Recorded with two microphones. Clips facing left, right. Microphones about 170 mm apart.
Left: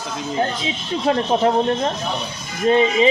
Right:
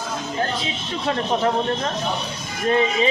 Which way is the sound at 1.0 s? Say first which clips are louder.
Left 4 dB; 25° left (ahead or behind).